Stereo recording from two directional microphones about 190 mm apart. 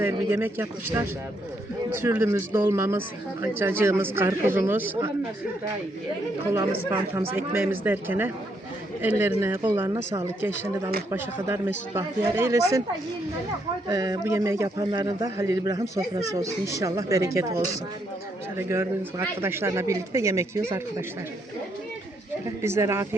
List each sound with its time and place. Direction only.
0.0 s speech: 10° right (ahead or behind)
6.5 s speech: 15° right (ahead or behind)
13.8 s a man's voice: 20° right (ahead or behind)
18.5 s speech: 15° right (ahead or behind)
22.4 s speech: 15° right (ahead or behind)